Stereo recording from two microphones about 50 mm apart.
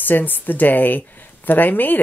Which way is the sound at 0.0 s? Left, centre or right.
Left.